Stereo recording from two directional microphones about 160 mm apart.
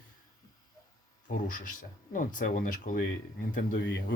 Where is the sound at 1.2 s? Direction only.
55° left (ahead or behind).